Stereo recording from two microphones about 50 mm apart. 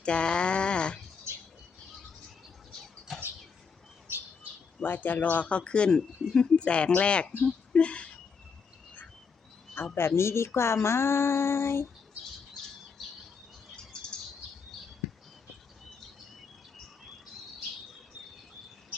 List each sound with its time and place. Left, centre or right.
0.0 s a sound: left
2.7 s rodents: centre
4.8 s speech: left
9.7 s speech: left
13.7 s bird flight: centre